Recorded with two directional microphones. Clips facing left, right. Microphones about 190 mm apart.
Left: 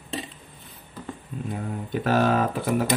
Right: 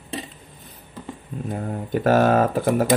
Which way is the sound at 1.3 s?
40° right (ahead or behind).